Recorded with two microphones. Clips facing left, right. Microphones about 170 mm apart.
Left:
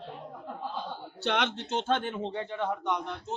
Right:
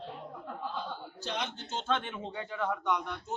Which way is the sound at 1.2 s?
80° left.